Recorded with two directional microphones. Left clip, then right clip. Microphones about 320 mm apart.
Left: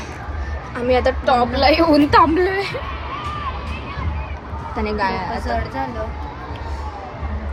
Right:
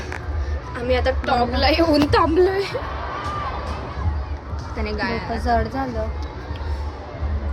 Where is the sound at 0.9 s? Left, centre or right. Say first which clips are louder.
Left 4 dB; centre; by 2.8 s left.